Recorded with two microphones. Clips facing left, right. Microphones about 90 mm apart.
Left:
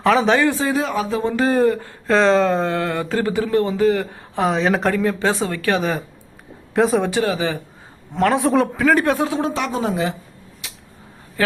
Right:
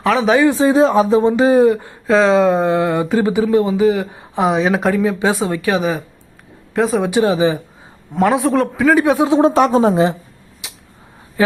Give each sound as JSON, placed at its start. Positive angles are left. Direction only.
{"t": 0.0, "sound": "speech", "side_deg": 0}
{"t": 0.3, "sound": "speech", "side_deg": -20}
{"t": 2.0, "sound": "speech", "side_deg": -5}
{"t": 7.1, "sound": "speech", "side_deg": -20}
{"t": 8.1, "sound": "speech", "side_deg": -5}
{"t": 9.0, "sound": "speech", "side_deg": -20}
{"t": 9.6, "sound": "a woman's voice", "side_deg": -35}
{"t": 10.6, "sound": "a sound", "side_deg": -15}
{"t": 11.4, "sound": "speech", "side_deg": -20}